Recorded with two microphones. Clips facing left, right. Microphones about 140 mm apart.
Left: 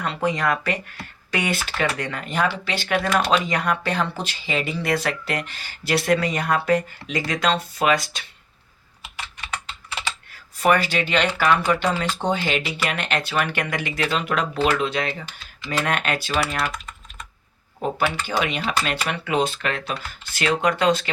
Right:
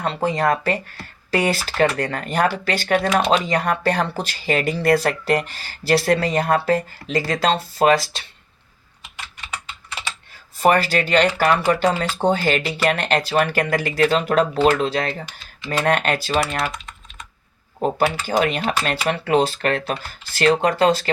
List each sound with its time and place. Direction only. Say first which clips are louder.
0.0 s speech: right 3 dB; 30° right (ahead or behind)
10.6 s speech: right 3 dB; 35° right (ahead or behind)
16.6 s typing: right 2 dB; 5° left (ahead or behind)
17.7 s speech: right 4 dB; 40° right (ahead or behind)